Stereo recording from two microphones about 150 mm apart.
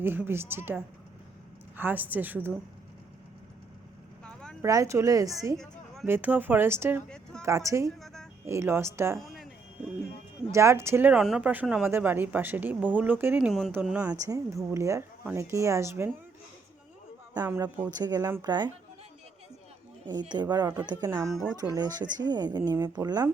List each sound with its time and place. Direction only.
0.0 s a woman's voice: 15° right (ahead or behind)
4.2 s a sound: 5° left (ahead or behind)
4.6 s speech: 20° right (ahead or behind)
5.5 s a sound: centre (ahead or behind)
6.1 s a woman's voice: 15° right (ahead or behind)
7.9 s music: centre (ahead or behind)
8.4 s a woman's voice: 15° right (ahead or behind)
9.1 s music: centre (ahead or behind)
10.5 s a woman's voice: 20° right (ahead or behind)
13.5 s a woman's voice: centre (ahead or behind)
14.1 s speech: 20° right (ahead or behind)
17.5 s a woman's voice: 15° right (ahead or behind)
17.9 s speech: 25° right (ahead or behind)
20.1 s speech: 30° right (ahead or behind)